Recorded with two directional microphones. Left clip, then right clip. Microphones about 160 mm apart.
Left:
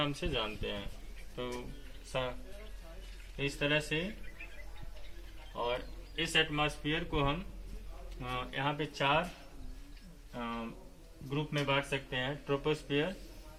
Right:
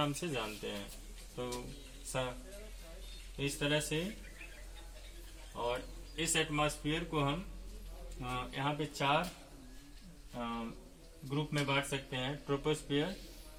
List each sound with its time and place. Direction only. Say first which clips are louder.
0.0 s speech: left 2 dB; 40° right (ahead or behind)
3.3 s speech: left 2 dB; 30° right (ahead or behind)
5.5 s speech: left 2 dB; 30° right (ahead or behind)
10.3 s speech: left 1 dB; 20° right (ahead or behind)